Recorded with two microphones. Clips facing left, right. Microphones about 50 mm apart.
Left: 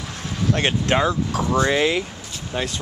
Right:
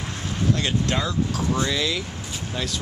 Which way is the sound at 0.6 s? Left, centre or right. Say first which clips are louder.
Left 5 dB; left.